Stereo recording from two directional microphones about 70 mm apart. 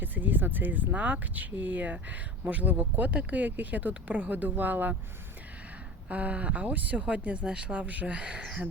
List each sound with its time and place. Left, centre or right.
0.0 s speech: right
6.1 s speech: centre